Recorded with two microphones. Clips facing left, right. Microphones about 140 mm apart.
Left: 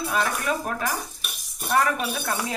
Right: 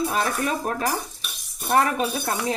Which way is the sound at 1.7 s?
30° right (ahead or behind).